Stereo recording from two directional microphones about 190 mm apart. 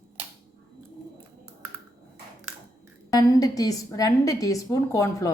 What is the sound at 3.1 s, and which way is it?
A woman's voice, 20° left (ahead or behind).